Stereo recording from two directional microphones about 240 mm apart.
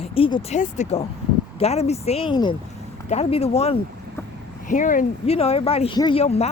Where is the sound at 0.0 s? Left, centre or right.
Left.